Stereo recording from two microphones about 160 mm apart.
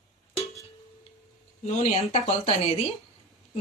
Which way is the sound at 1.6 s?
45° left (ahead or behind).